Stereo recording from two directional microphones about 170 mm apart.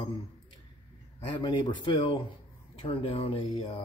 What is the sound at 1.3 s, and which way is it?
A man's voice, 25° left (ahead or behind).